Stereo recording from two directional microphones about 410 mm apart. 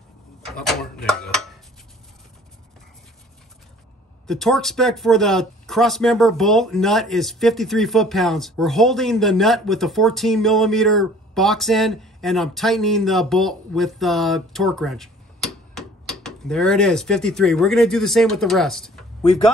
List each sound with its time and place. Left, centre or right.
0.5 s speech: centre
4.3 s speech: centre